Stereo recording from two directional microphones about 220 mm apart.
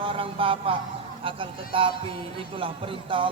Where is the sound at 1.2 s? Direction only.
25° right (ahead or behind).